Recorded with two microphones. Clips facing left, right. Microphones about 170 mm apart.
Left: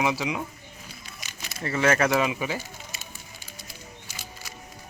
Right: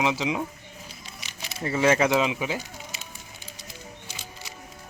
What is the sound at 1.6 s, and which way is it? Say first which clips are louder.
Speech: right 1 dB; 10° right (ahead or behind).